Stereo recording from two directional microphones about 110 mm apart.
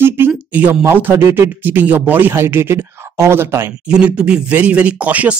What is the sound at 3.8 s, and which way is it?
Speech, 10° right (ahead or behind).